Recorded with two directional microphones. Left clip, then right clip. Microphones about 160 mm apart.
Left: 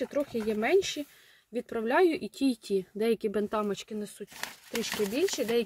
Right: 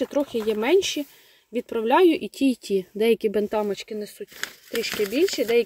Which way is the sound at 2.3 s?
30° right (ahead or behind).